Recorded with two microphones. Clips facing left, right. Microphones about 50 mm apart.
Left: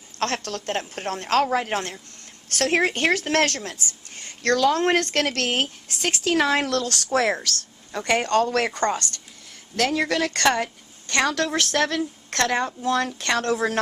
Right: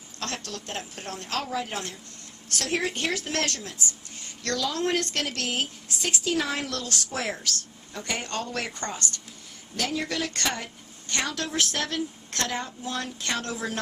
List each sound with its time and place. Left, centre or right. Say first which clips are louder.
0.2 s speech: left 8 dB; left
7.9 s a woman's voice: left 11 dB; left
8.7 s speech: left 10 dB; left
9.7 s a woman's voice: left 7 dB; left